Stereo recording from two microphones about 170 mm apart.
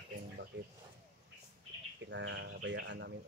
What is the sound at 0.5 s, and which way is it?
Speech, 90° right.